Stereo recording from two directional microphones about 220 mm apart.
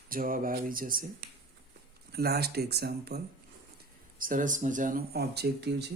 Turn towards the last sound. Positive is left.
turn(degrees=-50)  # may be behind; listen again after turning